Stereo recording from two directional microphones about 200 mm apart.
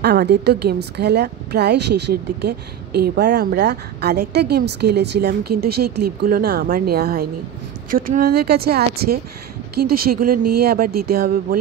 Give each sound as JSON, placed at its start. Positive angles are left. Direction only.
{"t": 0.0, "sound": "a woman's voice", "side_deg": -55}